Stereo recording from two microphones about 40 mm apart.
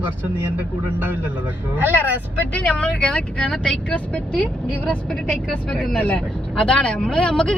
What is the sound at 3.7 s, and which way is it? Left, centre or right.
Speech, left.